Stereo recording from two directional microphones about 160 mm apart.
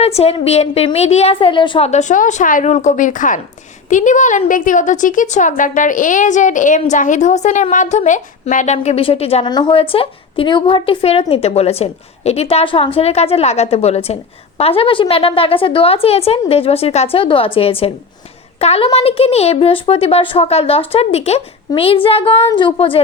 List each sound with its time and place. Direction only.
0.0 s speech: 40° left (ahead or behind)
1.9 s a woman's voice: 50° left (ahead or behind)
9.5 s speech: 30° left (ahead or behind)